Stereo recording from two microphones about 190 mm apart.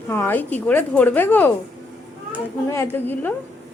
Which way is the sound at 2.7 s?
15° left (ahead or behind).